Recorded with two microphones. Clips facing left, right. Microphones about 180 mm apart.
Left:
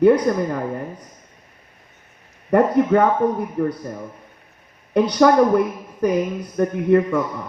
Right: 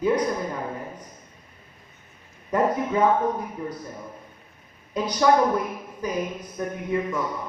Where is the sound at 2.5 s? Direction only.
65° left (ahead or behind).